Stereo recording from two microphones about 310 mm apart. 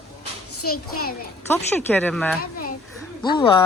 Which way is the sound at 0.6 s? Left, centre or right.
Left.